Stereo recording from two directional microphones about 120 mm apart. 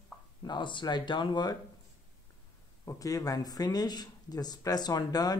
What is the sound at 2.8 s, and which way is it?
A man's voice, 25° left (ahead or behind).